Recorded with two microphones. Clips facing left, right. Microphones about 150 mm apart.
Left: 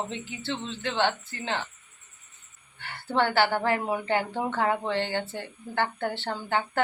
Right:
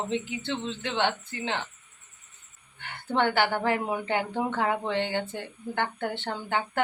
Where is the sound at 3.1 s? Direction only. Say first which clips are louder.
Left 1 dB; 20° right (ahead or behind).